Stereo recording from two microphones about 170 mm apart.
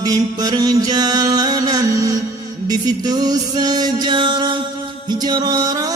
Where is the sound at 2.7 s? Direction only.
25° right (ahead or behind).